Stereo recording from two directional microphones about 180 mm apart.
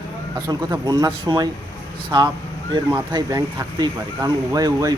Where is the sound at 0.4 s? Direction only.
20° right (ahead or behind).